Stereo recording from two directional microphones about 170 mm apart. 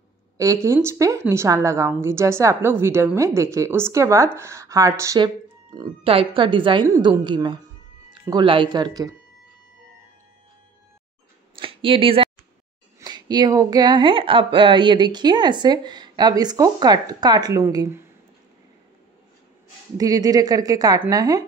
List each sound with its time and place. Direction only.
0.4 s a woman's voice: 20° right (ahead or behind)
11.5 s a sound: 30° right (ahead or behind)
13.0 s speech: 25° right (ahead or behind)
20.0 s speech: 20° right (ahead or behind)